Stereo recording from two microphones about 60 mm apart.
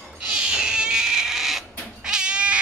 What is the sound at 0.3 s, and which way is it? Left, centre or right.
Cat, centre.